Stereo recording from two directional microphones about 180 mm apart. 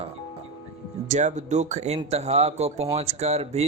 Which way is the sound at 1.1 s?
40° right (ahead or behind).